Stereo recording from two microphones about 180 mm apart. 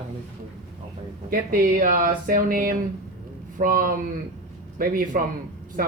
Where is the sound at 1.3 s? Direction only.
50° right (ahead or behind).